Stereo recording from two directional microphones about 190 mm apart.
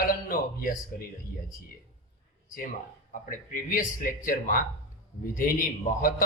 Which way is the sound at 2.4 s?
45° left (ahead or behind).